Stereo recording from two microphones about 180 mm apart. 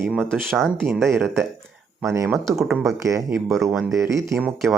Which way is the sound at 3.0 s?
15° right (ahead or behind).